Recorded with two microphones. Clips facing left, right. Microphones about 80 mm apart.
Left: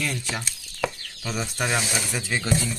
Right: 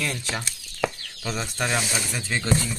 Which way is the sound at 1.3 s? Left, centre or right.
Centre.